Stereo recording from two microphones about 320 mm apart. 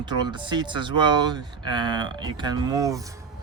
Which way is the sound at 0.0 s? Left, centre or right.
Centre.